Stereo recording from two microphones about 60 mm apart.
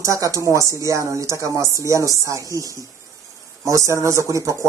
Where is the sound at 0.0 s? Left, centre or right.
Right.